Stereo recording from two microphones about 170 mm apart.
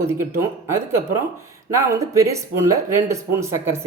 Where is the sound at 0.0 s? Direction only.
15° right (ahead or behind).